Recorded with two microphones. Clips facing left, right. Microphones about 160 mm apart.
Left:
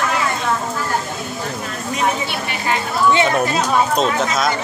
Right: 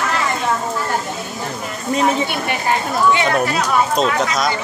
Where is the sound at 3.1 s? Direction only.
25° left (ahead or behind).